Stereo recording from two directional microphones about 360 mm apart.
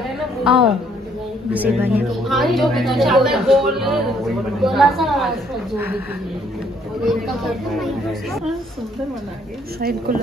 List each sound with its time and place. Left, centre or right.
0.5 s a woman's voice: centre
7.1 s a woman's voice: centre
9.8 s speech: right